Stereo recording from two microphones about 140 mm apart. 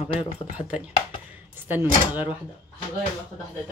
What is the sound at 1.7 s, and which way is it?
Speech, 15° right (ahead or behind).